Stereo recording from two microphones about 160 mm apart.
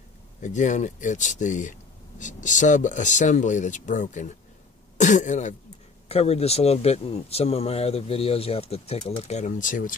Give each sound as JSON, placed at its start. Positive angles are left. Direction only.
{"t": 0.4, "sound": "speech", "side_deg": 50}